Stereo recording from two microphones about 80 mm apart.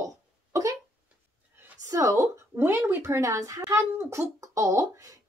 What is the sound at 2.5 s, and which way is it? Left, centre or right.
Speech, right.